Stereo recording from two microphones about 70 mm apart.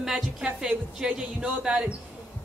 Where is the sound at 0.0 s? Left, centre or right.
Centre.